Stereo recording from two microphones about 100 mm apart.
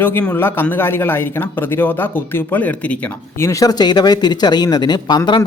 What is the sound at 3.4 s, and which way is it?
Speech, 30° left (ahead or behind).